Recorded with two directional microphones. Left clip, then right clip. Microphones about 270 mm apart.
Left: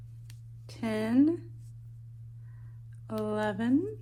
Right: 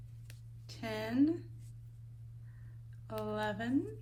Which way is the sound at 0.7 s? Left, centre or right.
Left.